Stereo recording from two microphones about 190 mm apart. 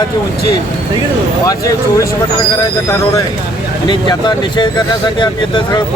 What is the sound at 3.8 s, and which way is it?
Speech, 25° left (ahead or behind).